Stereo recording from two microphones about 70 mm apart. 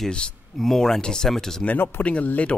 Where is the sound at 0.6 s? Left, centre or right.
Centre.